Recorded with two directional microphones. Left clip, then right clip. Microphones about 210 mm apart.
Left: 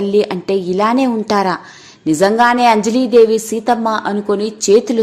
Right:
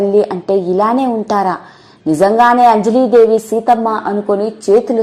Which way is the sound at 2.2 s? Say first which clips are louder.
Right 3 dB; 20° left (ahead or behind).